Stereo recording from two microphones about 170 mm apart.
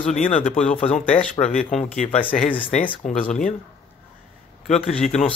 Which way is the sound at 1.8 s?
45° left (ahead or behind).